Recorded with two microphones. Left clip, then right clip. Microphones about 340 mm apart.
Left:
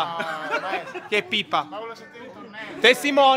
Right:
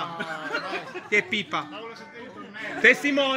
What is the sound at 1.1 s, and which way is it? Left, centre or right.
Speech, centre.